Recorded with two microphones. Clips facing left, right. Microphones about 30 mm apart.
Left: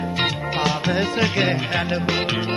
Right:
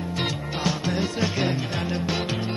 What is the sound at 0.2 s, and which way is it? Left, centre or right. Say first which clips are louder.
Music: left 5 dB; left.